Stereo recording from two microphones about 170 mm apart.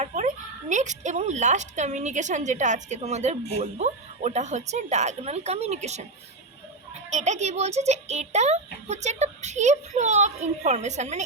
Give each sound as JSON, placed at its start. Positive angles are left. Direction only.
{"t": 0.0, "sound": "a woman's voice", "side_deg": -45}
{"t": 7.1, "sound": "a child's voice", "side_deg": -45}